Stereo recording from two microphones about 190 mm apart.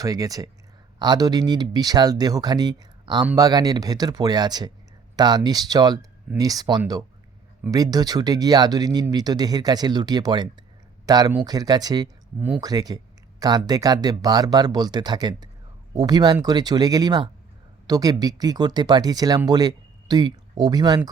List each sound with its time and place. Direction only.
0.0 s speech: 20° right (ahead or behind)